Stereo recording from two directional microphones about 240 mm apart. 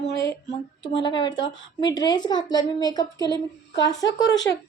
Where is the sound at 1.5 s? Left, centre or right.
Left.